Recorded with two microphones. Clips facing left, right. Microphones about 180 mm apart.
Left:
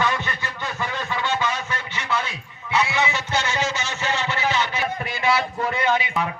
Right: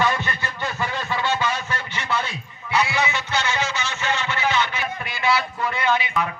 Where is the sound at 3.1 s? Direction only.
45° left (ahead or behind).